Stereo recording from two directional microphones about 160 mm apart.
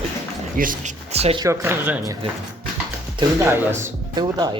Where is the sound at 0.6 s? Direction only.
60° right (ahead or behind).